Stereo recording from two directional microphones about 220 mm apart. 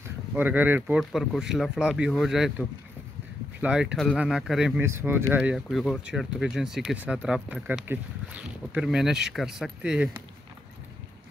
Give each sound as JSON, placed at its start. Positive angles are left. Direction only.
{"t": 0.3, "sound": "speech", "side_deg": -10}
{"t": 3.6, "sound": "speech", "side_deg": -5}